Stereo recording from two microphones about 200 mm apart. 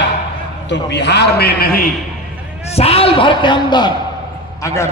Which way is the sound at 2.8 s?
30° left (ahead or behind).